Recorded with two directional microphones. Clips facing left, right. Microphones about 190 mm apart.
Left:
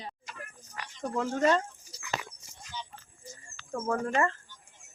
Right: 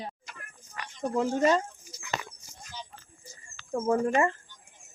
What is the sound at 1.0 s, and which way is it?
Speech, 15° right (ahead or behind).